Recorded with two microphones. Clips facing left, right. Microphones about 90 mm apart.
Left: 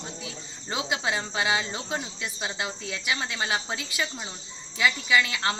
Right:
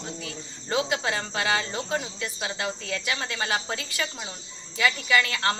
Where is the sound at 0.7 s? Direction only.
15° left (ahead or behind).